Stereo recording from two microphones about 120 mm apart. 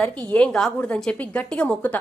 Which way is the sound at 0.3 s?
10° left (ahead or behind).